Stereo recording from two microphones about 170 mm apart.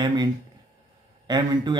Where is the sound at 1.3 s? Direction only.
25° right (ahead or behind).